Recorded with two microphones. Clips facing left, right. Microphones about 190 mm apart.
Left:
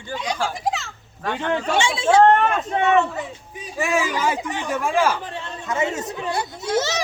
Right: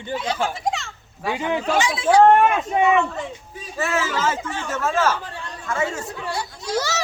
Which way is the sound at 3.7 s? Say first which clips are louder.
Left 1 dB; 15° left (ahead or behind).